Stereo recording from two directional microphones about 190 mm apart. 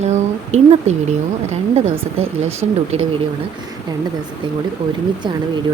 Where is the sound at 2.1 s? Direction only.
35° right (ahead or behind).